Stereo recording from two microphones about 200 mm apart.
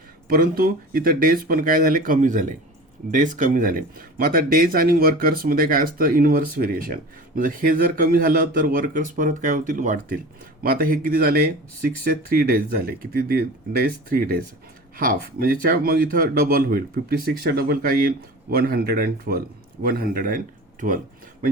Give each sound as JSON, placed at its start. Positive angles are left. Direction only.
{"t": 0.3, "sound": "speech", "side_deg": -45}